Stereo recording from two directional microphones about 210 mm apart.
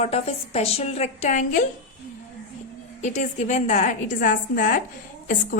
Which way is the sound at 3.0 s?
35° left (ahead or behind).